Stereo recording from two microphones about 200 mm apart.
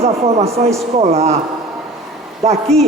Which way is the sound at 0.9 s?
30° right (ahead or behind).